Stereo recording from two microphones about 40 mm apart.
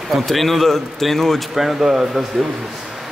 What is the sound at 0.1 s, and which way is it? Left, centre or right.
Speech, centre.